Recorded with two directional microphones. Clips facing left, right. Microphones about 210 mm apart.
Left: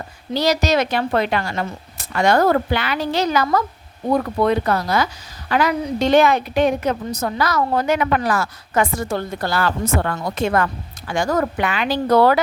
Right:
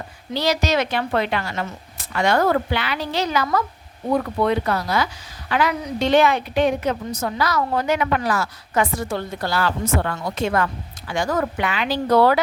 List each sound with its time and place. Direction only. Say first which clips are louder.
0.3 s a woman's voice: left 3 dB; 40° left (ahead or behind)